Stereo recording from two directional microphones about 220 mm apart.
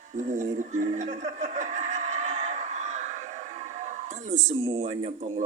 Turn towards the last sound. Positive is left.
turn(degrees=-30)  # may be behind; listen again after turning